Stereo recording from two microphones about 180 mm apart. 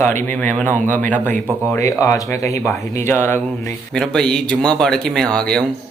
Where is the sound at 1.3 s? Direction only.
10° left (ahead or behind).